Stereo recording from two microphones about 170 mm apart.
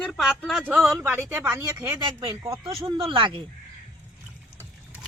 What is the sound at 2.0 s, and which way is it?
Speech, 30° right (ahead or behind).